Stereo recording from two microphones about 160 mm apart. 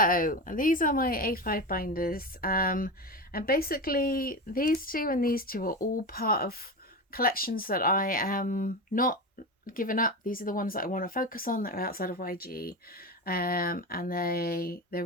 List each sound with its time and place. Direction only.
0.0 s speech: 60° left (ahead or behind)